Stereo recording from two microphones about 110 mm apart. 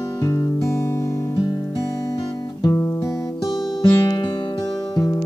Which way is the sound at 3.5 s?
40° left (ahead or behind).